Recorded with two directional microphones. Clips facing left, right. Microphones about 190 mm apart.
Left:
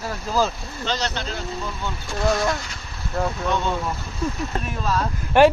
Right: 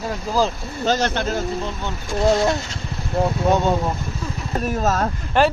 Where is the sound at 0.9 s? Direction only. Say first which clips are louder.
Right 7 dB; 50° right (ahead or behind).